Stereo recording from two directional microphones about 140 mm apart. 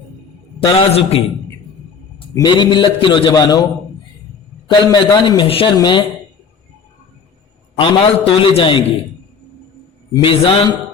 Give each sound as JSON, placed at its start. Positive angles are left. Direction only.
{"t": 0.6, "sound": "a man's voice", "side_deg": 40}
{"t": 2.3, "sound": "a man's voice", "side_deg": 30}
{"t": 4.7, "sound": "a man's voice", "side_deg": 30}
{"t": 7.8, "sound": "a man's voice", "side_deg": 40}
{"t": 10.2, "sound": "a man's voice", "side_deg": 40}